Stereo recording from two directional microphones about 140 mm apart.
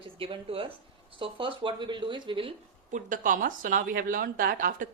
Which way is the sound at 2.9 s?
65° right (ahead or behind).